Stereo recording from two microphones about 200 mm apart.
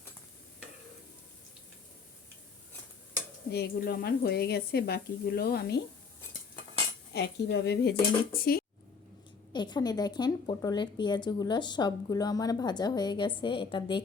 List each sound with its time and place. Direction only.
3.5 s speech: 55° left (ahead or behind)
7.1 s cutlery: 55° left (ahead or behind)
9.5 s a woman's voice: 20° left (ahead or behind)